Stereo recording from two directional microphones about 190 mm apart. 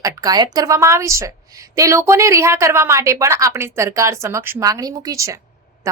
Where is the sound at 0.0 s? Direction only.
20° right (ahead or behind).